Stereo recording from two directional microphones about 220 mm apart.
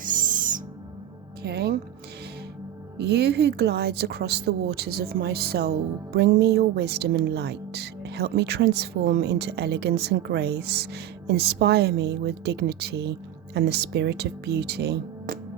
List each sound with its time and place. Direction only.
0.0 s owl: 35° right (ahead or behind)
1.4 s speech: 45° right (ahead or behind)
3.0 s a woman's voice: 50° right (ahead or behind)